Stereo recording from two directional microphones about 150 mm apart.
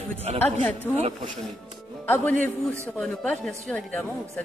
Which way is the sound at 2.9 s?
5° left (ahead or behind).